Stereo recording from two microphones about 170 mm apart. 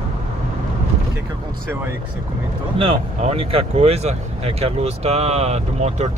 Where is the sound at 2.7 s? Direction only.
30° right (ahead or behind).